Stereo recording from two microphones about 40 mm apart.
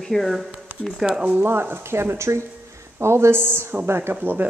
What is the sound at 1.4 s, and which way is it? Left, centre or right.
A woman's voice, right.